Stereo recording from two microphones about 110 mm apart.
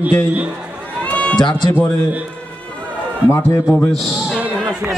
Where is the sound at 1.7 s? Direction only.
15° left (ahead or behind).